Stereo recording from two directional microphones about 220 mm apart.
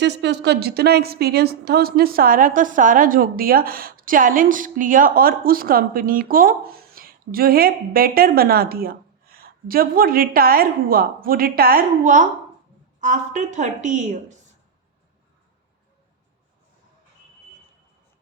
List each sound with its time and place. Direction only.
0.0 s a woman's voice: 50° right (ahead or behind); by 14.3 s 35° right (ahead or behind)